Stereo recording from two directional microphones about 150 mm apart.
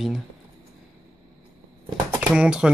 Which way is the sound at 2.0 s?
10° right (ahead or behind).